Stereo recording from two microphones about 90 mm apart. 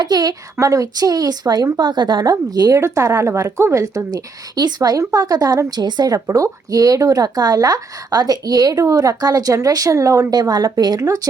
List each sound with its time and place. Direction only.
0.0 s speech: 45° right (ahead or behind)
10.5 s speech: 50° right (ahead or behind)